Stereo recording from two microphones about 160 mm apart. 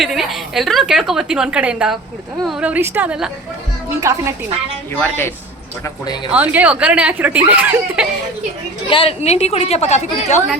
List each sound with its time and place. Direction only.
0.0 s a woman's voice: centre (ahead or behind)
4.0 s speech: 20° right (ahead or behind)
4.9 s a woman's voice: 15° left (ahead or behind)
6.3 s speech: 10° right (ahead or behind)
8.9 s a woman's voice: 35° left (ahead or behind)